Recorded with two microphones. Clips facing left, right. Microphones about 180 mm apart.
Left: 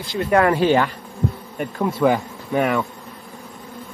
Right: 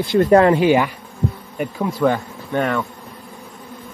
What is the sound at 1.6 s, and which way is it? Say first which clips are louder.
Speech: even; centre (ahead or behind).